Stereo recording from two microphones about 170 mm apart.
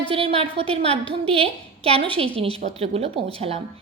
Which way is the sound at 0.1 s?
35° right (ahead or behind).